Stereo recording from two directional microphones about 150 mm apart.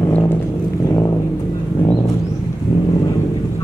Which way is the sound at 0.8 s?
20° left (ahead or behind).